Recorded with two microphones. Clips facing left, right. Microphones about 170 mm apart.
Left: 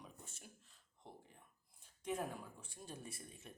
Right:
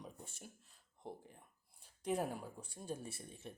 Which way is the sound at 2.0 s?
35° right (ahead or behind).